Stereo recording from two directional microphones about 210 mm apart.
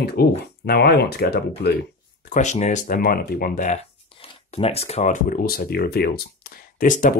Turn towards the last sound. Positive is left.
turn(degrees=40)  # may be behind; listen again after turning